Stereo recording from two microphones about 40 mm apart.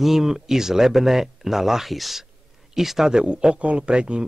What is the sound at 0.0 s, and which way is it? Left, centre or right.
Speech, centre.